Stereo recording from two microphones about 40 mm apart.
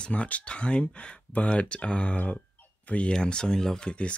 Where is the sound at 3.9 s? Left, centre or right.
Left.